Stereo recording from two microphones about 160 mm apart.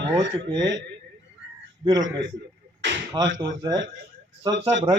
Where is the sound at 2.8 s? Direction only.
90° right.